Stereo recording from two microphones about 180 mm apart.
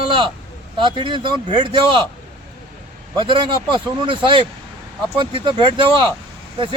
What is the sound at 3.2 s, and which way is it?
Speech, 25° right (ahead or behind).